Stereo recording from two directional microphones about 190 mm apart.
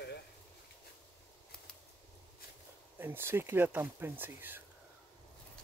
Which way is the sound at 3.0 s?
10° right (ahead or behind).